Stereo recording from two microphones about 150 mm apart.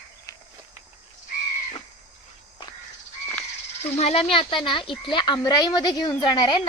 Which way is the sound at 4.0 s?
45° left (ahead or behind).